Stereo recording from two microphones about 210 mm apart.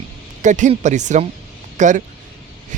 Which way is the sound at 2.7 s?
35° right (ahead or behind).